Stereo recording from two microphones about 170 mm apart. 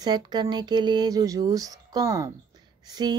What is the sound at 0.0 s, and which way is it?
Speech, 25° right (ahead or behind).